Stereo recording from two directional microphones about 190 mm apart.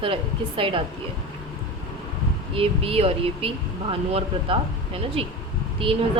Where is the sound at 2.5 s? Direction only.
30° right (ahead or behind).